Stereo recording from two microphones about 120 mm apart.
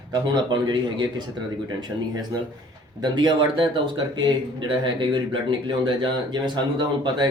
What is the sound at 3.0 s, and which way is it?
Speech, 40° right (ahead or behind).